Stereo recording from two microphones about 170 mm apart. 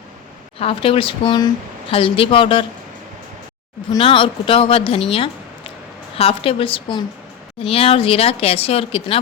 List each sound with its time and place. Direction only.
0.6 s speech: 35° left (ahead or behind)
3.9 s speech: 30° left (ahead or behind)
5.0 s a sound: 30° left (ahead or behind)
6.1 s speech: 35° left (ahead or behind)